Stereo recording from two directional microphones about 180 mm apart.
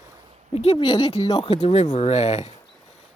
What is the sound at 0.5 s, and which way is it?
Speech, 30° left (ahead or behind).